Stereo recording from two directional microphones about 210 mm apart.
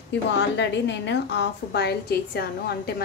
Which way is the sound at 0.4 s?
55° left (ahead or behind).